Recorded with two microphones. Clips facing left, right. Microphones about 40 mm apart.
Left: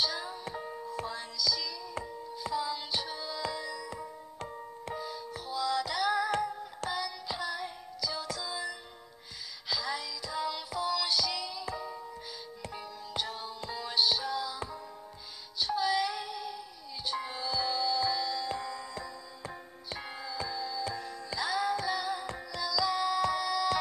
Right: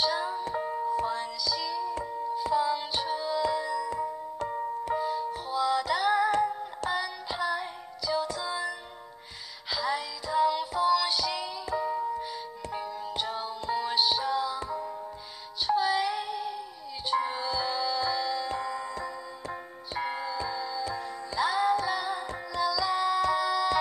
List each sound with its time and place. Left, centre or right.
0.0 s music: centre
4.5 s music: right
4.9 s music: centre
15.6 s music: centre
20.1 s music: centre